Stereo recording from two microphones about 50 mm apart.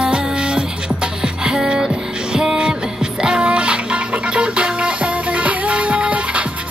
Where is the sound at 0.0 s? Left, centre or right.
Centre.